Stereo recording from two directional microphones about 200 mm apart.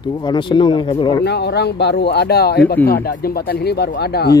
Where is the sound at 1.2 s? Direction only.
55° left (ahead or behind).